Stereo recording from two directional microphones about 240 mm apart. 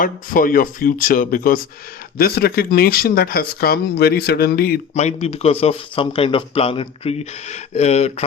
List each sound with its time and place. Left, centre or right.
0.0 s speech: left